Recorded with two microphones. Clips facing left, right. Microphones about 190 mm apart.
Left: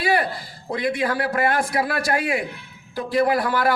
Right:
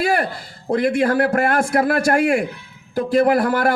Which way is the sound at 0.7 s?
50° right (ahead or behind).